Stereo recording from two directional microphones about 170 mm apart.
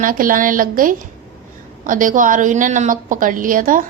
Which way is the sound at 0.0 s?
55° right (ahead or behind).